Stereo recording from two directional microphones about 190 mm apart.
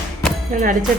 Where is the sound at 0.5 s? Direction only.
45° right (ahead or behind).